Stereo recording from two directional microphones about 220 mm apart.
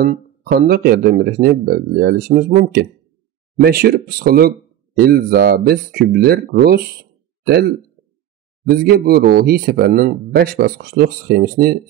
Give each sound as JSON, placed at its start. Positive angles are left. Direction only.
{"t": 0.0, "sound": "speech", "side_deg": -40}